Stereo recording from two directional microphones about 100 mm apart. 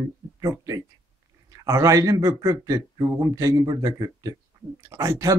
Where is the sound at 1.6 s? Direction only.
35° right (ahead or behind).